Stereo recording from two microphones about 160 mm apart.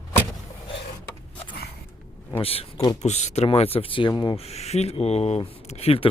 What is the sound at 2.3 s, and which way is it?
Speech, 35° left (ahead or behind).